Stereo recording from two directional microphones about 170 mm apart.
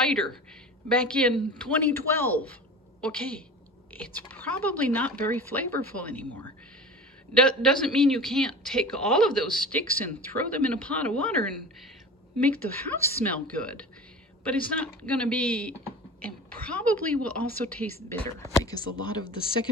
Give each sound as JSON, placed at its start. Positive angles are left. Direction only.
{"t": 0.0, "sound": "a woman's voice", "side_deg": 5}
{"t": 12.4, "sound": "speech", "side_deg": 10}
{"t": 18.5, "sound": "speech", "side_deg": 20}